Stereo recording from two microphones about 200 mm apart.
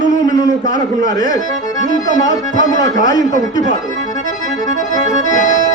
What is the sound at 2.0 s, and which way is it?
Speech, 40° left (ahead or behind).